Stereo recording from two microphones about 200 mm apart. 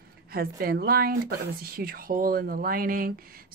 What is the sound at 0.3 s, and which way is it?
Speech, 50° right (ahead or behind).